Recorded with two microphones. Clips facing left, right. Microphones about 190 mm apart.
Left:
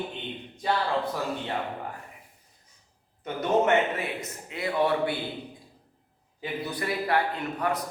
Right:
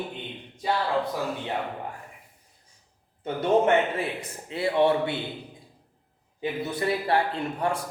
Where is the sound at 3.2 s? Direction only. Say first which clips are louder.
Right 2 dB; 30° right (ahead or behind).